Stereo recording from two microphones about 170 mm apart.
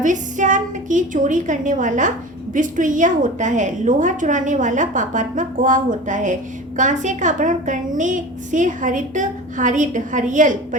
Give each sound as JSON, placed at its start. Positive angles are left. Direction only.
{"t": 0.0, "sound": "a woman's voice", "side_deg": -45}